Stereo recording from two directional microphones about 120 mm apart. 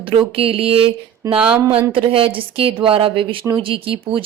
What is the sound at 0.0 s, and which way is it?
Speech, 50° right (ahead or behind).